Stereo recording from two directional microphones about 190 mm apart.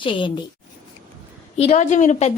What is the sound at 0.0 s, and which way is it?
Speech, 25° left (ahead or behind).